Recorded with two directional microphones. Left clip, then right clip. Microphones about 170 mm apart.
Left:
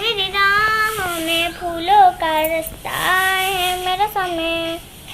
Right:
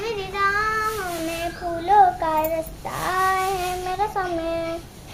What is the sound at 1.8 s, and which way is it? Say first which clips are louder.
Child singing: left 4 dB; 15° right (ahead or behind).